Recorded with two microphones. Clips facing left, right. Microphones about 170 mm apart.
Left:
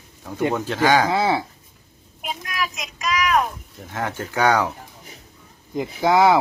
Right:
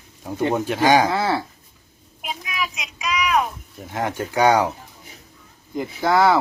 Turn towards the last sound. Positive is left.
turn(degrees=20)  # may be behind; listen again after turning